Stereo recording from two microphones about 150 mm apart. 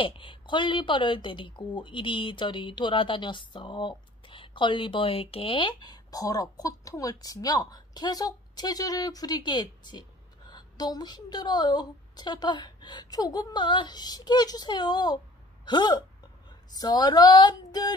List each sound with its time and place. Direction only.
0.0 s a woman's voice: 35° left (ahead or behind)